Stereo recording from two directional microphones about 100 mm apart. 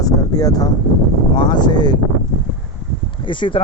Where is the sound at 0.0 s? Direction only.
40° left (ahead or behind).